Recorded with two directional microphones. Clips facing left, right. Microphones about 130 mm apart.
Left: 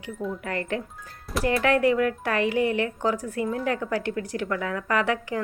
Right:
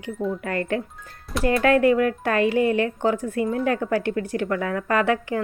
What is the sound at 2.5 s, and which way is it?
Speech, 25° left (ahead or behind).